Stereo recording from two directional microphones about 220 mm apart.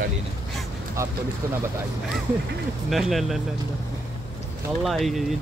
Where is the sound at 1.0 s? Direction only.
15° right (ahead or behind).